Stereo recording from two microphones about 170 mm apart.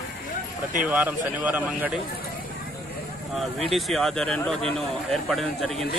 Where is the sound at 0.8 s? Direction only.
10° right (ahead or behind).